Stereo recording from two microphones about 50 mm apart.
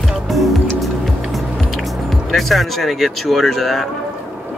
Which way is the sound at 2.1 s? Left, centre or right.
Centre.